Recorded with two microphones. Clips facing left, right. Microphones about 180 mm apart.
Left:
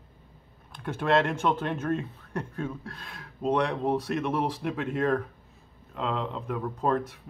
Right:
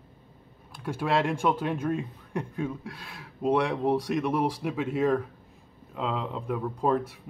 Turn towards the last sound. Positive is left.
turn(degrees=-5)  # may be behind; listen again after turning